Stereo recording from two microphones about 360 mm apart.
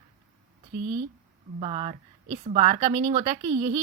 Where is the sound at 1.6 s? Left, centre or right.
Centre.